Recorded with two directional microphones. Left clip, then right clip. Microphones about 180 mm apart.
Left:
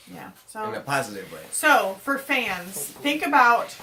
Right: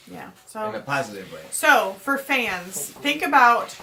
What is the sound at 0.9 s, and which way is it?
Speech, 65° left (ahead or behind).